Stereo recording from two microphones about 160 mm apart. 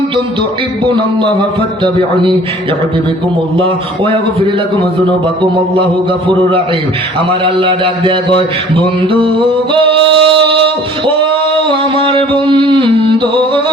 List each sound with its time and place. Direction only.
0.9 s a man's voice: 30° right (ahead or behind)
3.6 s a man's voice: 35° right (ahead or behind)
7.3 s a man's voice: 30° right (ahead or behind)
10.1 s a man's voice: 35° right (ahead or behind)
11.7 s music: 35° right (ahead or behind)